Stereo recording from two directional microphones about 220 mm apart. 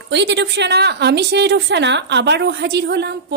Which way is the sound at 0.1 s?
55° right (ahead or behind).